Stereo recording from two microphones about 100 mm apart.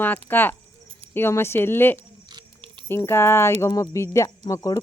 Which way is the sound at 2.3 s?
55° right (ahead or behind).